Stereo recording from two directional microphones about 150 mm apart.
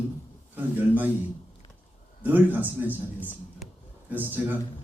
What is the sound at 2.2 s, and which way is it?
Speech, 10° right (ahead or behind).